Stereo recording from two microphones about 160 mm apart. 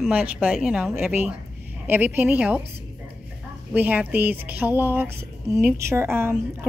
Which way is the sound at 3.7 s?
10° right (ahead or behind).